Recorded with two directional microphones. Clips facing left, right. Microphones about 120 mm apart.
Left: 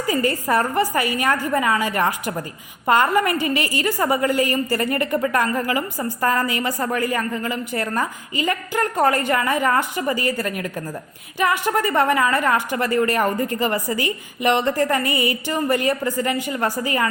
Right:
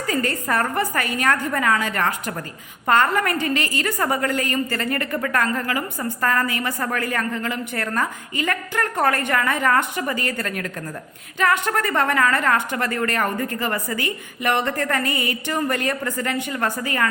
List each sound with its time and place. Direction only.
0.1 s a woman's voice: 10° left (ahead or behind)